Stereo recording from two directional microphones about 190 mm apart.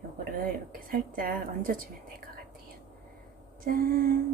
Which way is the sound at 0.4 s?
45° right (ahead or behind).